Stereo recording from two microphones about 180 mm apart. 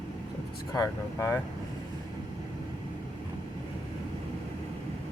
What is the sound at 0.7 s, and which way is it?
Speech, 20° left (ahead or behind).